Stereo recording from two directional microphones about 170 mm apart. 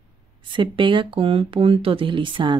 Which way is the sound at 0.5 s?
30° right (ahead or behind).